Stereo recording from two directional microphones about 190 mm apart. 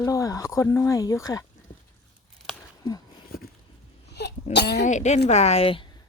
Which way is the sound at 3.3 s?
50° left (ahead or behind).